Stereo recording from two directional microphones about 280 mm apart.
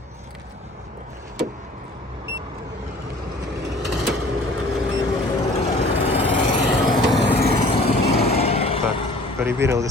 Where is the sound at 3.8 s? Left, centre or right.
Right.